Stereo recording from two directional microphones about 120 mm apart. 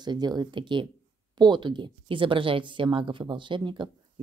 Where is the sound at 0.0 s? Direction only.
35° right (ahead or behind).